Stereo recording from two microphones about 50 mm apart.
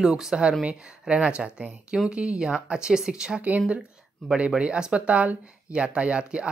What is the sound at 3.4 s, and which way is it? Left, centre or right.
Speech, right.